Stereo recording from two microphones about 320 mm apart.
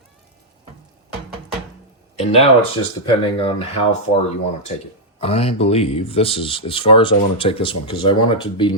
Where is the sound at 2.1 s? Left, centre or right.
Centre.